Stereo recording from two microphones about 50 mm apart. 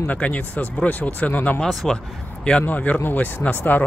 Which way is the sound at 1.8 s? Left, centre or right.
Centre.